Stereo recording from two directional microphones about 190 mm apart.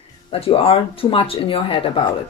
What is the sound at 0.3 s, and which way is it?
Speech, 30° left (ahead or behind).